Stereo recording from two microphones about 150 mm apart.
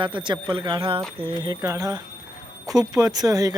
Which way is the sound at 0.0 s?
30° right (ahead or behind).